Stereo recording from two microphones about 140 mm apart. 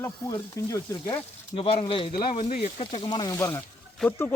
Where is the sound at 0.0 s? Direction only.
25° left (ahead or behind).